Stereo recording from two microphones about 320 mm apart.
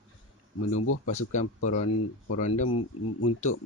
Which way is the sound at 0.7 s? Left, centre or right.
Left.